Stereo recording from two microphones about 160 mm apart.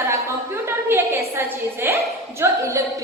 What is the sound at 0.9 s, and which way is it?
A woman's voice, 15° right (ahead or behind).